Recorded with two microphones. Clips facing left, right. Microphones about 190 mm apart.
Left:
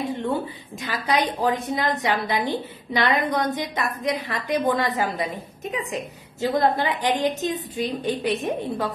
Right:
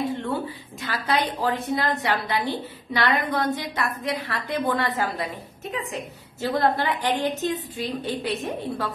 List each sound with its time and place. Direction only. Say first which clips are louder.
0.1 s a woman's voice: left 2 dB; 15° left (ahead or behind)